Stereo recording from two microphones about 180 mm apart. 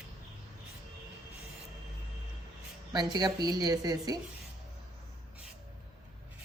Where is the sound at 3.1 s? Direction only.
20° right (ahead or behind).